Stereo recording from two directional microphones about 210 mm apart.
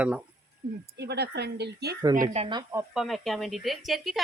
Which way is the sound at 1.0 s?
50° right (ahead or behind).